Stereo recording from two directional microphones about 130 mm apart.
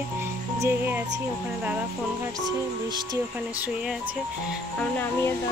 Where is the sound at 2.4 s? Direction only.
30° right (ahead or behind).